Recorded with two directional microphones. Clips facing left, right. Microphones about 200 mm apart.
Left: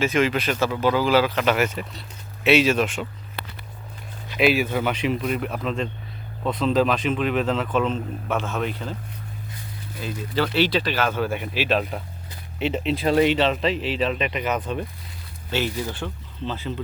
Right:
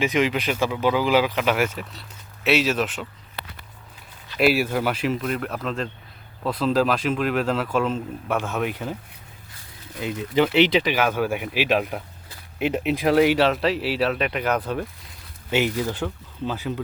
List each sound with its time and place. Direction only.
0.0 s speech: 15° right (ahead or behind)
4.4 s speech: 5° right (ahead or behind)
10.0 s speech: 20° right (ahead or behind)
15.4 s speech: 15° right (ahead or behind)